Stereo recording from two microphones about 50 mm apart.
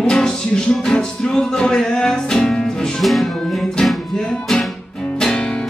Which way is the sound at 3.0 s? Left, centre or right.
Centre.